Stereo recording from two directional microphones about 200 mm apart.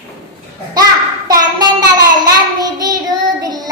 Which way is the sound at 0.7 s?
20° right (ahead or behind).